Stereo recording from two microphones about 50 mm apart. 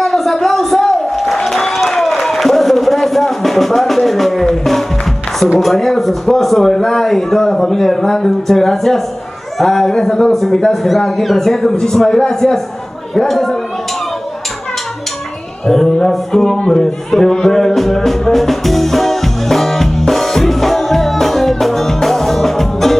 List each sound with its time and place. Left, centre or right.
0.0 s a sound: centre
5.6 s speech: centre
11.7 s music: centre
13.1 s speech: centre
15.6 s music: centre